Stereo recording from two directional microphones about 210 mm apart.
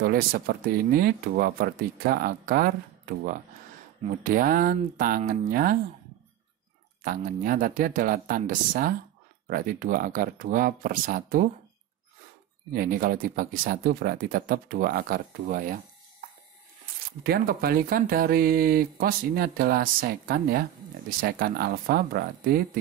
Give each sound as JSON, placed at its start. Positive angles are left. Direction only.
{"t": 0.0, "sound": "speech", "side_deg": -45}
{"t": 7.0, "sound": "speech", "side_deg": -40}
{"t": 12.7, "sound": "speech", "side_deg": -45}
{"t": 17.2, "sound": "speech", "side_deg": -45}